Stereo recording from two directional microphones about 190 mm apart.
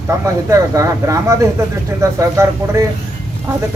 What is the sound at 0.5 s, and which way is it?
Speech, 15° right (ahead or behind).